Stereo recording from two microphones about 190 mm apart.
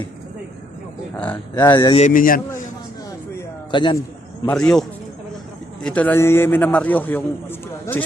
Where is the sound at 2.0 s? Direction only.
45° left (ahead or behind).